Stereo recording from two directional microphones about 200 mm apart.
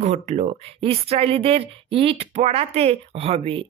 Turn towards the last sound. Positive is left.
turn(degrees=-30)  # may be behind; listen again after turning